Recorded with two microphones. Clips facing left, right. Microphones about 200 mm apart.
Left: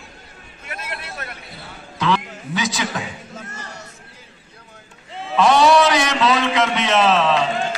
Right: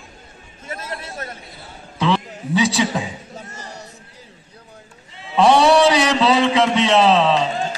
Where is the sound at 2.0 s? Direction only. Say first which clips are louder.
Right 1 dB; 30° right (ahead or behind).